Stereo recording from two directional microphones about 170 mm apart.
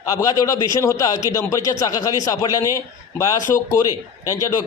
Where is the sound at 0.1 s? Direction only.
20° left (ahead or behind).